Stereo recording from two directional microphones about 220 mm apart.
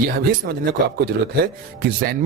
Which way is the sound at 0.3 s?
50° right (ahead or behind).